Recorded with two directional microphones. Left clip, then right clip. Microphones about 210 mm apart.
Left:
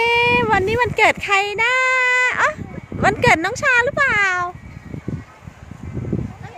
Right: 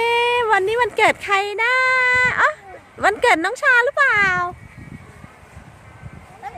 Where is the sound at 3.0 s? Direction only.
Centre (ahead or behind).